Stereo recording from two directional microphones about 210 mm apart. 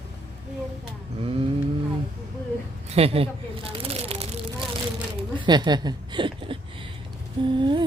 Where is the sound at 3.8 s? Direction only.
30° right (ahead or behind).